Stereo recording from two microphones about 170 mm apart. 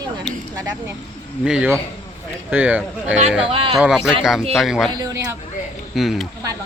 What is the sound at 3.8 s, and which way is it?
Speech, 5° right (ahead or behind).